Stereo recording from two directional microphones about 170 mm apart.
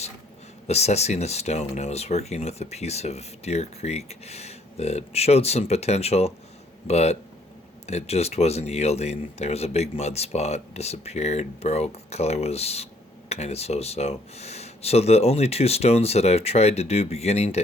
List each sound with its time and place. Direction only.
0.7 s speech: 40° left (ahead or behind)